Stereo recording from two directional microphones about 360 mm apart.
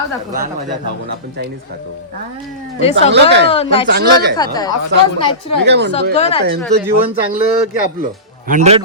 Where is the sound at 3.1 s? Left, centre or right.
Right.